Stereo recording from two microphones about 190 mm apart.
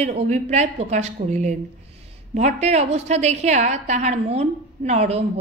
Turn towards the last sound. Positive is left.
turn(degrees=-35)  # may be behind; listen again after turning